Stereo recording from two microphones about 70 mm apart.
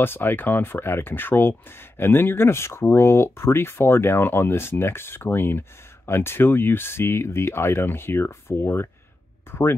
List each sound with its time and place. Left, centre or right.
0.0 s speech: left